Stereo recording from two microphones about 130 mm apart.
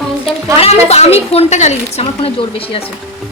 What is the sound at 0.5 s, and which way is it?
A woman's voice, 50° left (ahead or behind).